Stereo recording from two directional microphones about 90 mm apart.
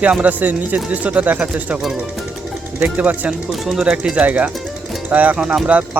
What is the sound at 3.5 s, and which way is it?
Speech, centre (ahead or behind).